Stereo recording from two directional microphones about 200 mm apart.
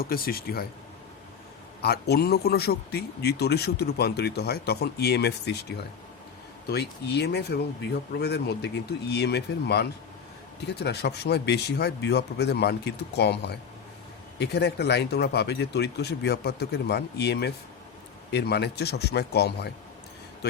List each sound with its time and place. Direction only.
0.0 s a man's voice: 50° left (ahead or behind)
1.8 s a man's voice: 55° left (ahead or behind)